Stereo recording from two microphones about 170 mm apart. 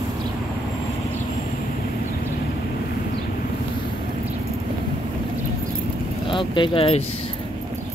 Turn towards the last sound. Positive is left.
turn(degrees=30)  # may be behind; listen again after turning